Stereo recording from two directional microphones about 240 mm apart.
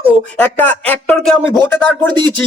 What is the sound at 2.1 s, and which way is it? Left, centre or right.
Speech, centre.